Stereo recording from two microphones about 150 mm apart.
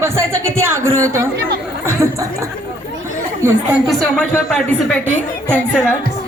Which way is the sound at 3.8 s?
Centre (ahead or behind).